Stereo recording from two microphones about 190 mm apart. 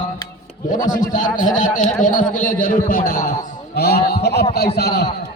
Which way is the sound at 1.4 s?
40° left (ahead or behind).